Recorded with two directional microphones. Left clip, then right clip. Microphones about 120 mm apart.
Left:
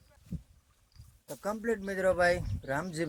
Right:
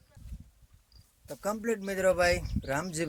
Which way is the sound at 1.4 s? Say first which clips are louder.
Right 1 dB; 10° right (ahead or behind).